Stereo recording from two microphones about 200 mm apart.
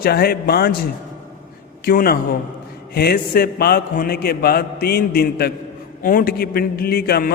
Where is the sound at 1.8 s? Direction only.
50° left (ahead or behind).